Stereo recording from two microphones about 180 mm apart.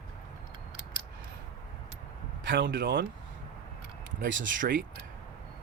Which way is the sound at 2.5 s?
75° right (ahead or behind).